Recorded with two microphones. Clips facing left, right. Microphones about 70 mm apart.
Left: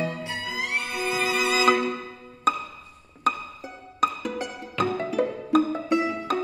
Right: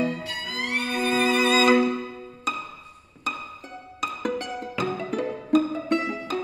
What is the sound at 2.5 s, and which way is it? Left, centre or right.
Music, left.